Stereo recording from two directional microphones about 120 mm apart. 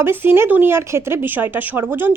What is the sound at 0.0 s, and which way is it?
A woman's voice, 20° right (ahead or behind).